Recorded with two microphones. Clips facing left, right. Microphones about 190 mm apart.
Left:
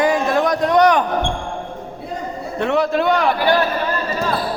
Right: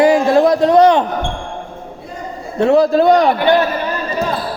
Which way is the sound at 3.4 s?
20° right (ahead or behind).